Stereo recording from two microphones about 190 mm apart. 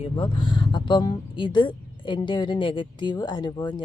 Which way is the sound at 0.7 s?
25° left (ahead or behind).